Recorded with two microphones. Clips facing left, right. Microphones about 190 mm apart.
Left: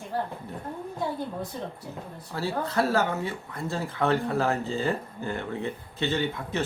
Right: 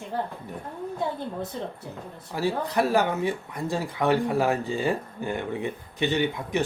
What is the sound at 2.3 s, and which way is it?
Speech, 15° right (ahead or behind).